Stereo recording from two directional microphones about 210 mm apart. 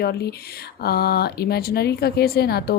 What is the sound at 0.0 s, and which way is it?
A woman's voice, 50° left (ahead or behind).